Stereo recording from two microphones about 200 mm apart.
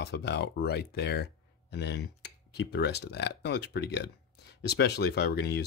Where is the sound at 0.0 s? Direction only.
55° left (ahead or behind).